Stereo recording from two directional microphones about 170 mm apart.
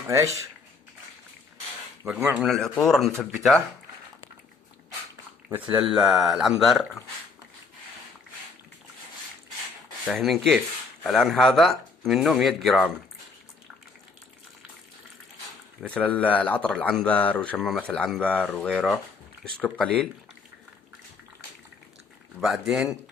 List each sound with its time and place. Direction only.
0.1 s speech: 20° right (ahead or behind)
2.1 s speech: 10° right (ahead or behind)
5.5 s speech: 5° right (ahead or behind)
10.1 s speech: centre (ahead or behind)
15.8 s speech: 10° left (ahead or behind)
19.5 s speech: 5° left (ahead or behind)
22.4 s speech: centre (ahead or behind)